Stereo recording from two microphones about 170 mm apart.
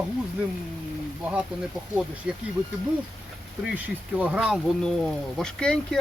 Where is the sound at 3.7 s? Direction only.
10° right (ahead or behind).